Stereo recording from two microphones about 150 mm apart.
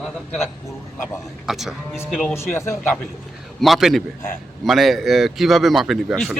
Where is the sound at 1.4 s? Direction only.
Centre (ahead or behind).